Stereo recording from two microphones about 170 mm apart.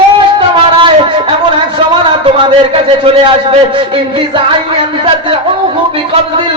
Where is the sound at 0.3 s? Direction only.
30° right (ahead or behind).